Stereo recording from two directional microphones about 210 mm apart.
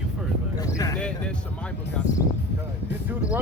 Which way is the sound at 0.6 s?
15° left (ahead or behind).